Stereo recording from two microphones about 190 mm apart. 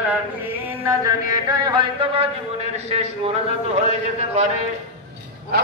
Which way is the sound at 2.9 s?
35° right (ahead or behind).